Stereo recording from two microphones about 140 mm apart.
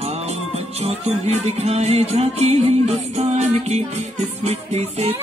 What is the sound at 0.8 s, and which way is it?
Music, 50° right (ahead or behind).